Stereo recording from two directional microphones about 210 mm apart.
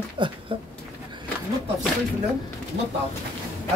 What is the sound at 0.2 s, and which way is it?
Speech, 25° right (ahead or behind).